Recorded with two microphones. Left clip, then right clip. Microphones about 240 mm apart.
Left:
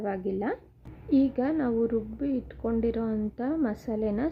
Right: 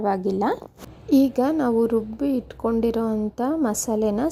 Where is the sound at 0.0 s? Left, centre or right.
Centre.